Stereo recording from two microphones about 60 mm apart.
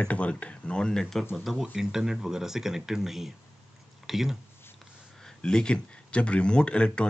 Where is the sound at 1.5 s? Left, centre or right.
Centre.